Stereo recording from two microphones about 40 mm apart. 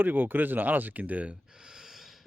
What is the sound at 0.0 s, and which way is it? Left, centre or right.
Speech, right.